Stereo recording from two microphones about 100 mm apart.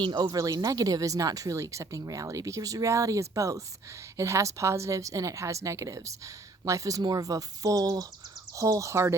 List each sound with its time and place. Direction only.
0.0 s speech: 50° right (ahead or behind); by 9.1 s 30° right (ahead or behind)